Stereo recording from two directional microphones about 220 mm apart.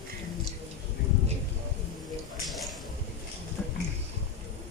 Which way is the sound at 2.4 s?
Centre (ahead or behind).